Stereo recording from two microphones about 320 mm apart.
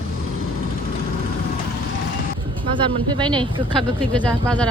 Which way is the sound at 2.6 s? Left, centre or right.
Centre.